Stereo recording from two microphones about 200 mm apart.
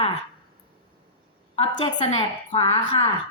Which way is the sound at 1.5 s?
30° left (ahead or behind).